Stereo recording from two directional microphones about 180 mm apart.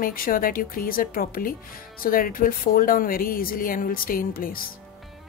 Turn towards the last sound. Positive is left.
turn(degrees=50)  # may be behind; listen again after turning